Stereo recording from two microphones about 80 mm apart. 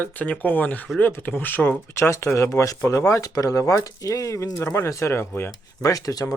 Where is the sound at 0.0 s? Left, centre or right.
Left.